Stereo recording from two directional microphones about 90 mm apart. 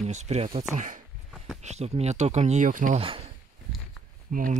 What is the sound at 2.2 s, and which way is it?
Speech, 80° right.